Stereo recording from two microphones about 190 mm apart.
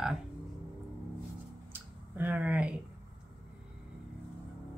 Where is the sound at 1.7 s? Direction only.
10° right (ahead or behind).